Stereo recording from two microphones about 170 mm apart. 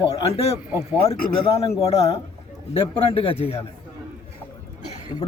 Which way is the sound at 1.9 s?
35° left (ahead or behind).